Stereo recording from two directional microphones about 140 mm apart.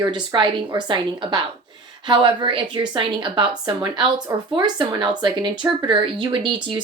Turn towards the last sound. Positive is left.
turn(degrees=-35)  # may be behind; listen again after turning